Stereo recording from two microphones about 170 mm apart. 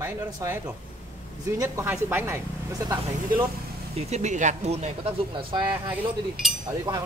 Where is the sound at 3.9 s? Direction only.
40° right (ahead or behind).